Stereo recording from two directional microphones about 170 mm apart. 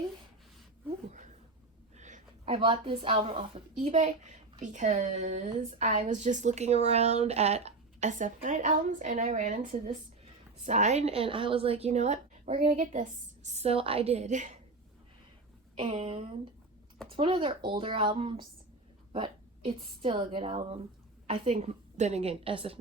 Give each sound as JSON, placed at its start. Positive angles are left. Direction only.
{"t": 2.0, "sound": "a sound", "side_deg": -45}
{"t": 2.6, "sound": "a woman's voice", "side_deg": -30}
{"t": 4.0, "sound": "a woman's voice", "side_deg": -45}
{"t": 15.7, "sound": "a woman's voice", "side_deg": -35}